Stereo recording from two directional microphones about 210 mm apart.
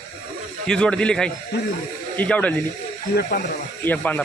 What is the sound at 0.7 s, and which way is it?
A man's voice, 5° left (ahead or behind).